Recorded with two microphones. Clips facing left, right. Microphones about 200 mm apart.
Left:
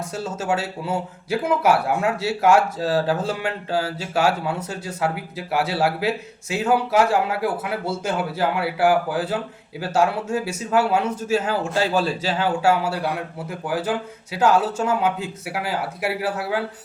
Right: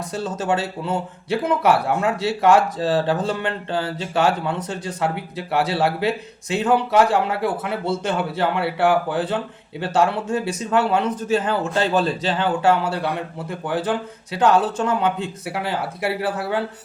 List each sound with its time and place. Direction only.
0.3 s speech: 5° left (ahead or behind)